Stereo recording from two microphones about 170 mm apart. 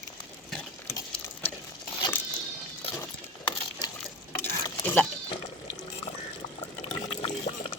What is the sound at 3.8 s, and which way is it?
Stir, 25° left (ahead or behind).